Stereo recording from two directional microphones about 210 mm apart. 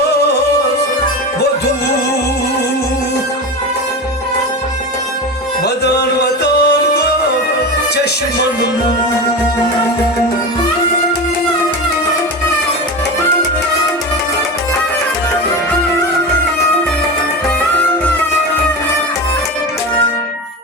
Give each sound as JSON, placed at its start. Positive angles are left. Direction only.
{"t": 5.6, "sound": "music", "side_deg": 50}